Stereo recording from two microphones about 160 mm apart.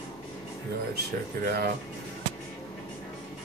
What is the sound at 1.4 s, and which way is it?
Speech, 85° right.